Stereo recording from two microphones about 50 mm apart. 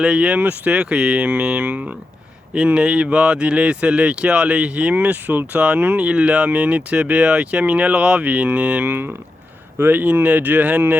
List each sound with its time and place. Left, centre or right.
0.0 s speech: centre; by 5.5 s right
5.5 s speech: right
8.2 s speech: right
9.7 s speech: right